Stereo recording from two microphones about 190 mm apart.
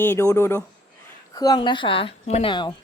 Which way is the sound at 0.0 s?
15° left (ahead or behind).